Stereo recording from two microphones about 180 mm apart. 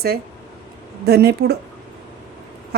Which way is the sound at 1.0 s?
60° right (ahead or behind).